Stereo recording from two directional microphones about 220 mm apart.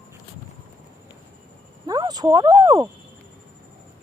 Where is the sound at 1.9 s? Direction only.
20° right (ahead or behind).